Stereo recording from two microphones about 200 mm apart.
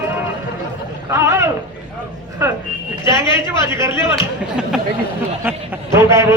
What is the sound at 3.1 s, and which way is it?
Speech, 15° right (ahead or behind).